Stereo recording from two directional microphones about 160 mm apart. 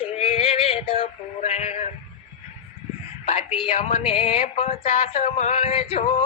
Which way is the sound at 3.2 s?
35° left (ahead or behind).